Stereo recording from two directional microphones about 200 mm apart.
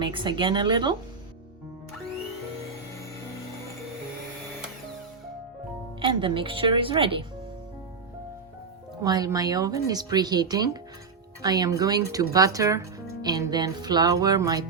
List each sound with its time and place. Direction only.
0.0 s speech: 25° right (ahead or behind)
6.0 s speech: 25° right (ahead or behind)
9.0 s a woman's voice: 20° right (ahead or behind)